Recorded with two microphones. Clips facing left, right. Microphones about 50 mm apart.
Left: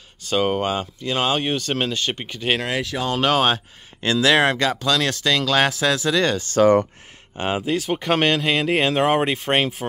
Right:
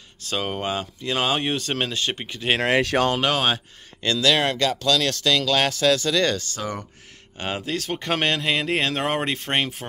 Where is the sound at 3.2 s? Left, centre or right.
Centre.